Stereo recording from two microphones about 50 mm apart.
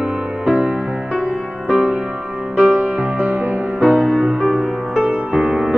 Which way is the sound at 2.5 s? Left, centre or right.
Right.